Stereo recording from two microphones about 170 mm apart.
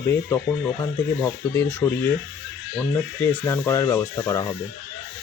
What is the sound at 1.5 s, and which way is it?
Speech, 10° left (ahead or behind).